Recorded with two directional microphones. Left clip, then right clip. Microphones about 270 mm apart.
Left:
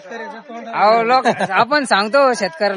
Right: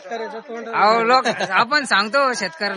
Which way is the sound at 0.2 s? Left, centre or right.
Centre.